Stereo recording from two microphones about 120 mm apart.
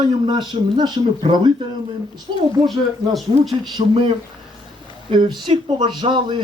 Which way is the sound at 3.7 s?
45° right (ahead or behind).